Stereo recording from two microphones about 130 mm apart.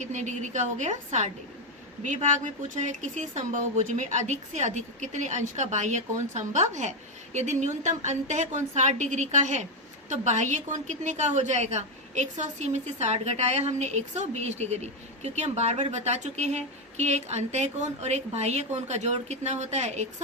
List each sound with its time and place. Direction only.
0.0 s a woman's voice: 65° right (ahead or behind)